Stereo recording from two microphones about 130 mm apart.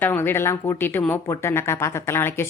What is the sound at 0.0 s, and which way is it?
Speech, 15° left (ahead or behind).